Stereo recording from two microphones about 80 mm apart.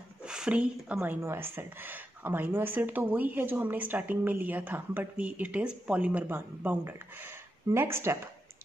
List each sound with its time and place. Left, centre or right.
0.2 s speech: centre
1.2 s speech: right